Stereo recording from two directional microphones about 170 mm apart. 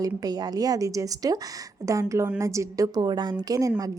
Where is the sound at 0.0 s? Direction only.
20° right (ahead or behind).